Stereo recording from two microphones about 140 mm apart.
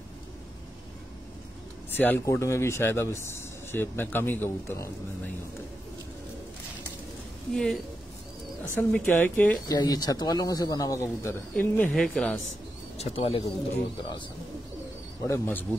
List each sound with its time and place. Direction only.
1.9 s a man's voice: 15° left (ahead or behind)
7.5 s a woman's voice: 5° left (ahead or behind)
9.7 s a man's voice: 30° left (ahead or behind); by 12.4 s 5° left (ahead or behind)
12.9 s speech: 45° left (ahead or behind)
15.2 s a man's voice: 15° left (ahead or behind)